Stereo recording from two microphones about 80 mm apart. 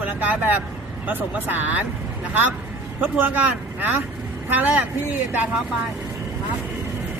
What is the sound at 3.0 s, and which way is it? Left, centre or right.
Speech, right.